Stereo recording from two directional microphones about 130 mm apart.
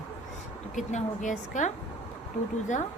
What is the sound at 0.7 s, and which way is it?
Speech, 70° left (ahead or behind).